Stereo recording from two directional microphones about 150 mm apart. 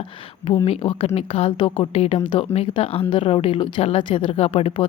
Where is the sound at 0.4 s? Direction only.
40° left (ahead or behind).